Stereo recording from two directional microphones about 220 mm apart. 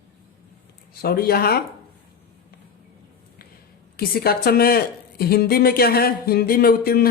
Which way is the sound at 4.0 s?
45° left (ahead or behind).